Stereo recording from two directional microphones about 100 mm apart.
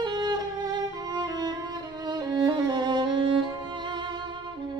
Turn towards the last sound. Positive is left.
turn(degrees=-50)  # may be behind; listen again after turning